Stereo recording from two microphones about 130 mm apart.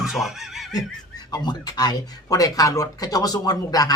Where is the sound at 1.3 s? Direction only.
30° left (ahead or behind).